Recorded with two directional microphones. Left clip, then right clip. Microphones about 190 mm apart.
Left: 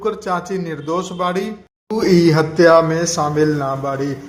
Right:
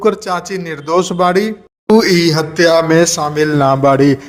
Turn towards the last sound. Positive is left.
turn(degrees=-40)  # may be behind; listen again after turning